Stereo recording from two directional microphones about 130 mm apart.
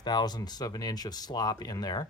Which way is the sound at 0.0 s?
35° left (ahead or behind).